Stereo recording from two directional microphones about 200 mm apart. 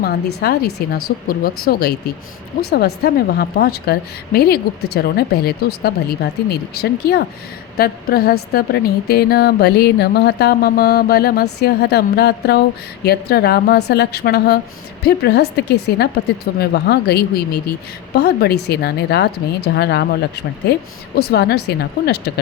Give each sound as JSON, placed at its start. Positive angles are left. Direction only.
{"t": 0.4, "sound": "a woman's voice", "side_deg": 50}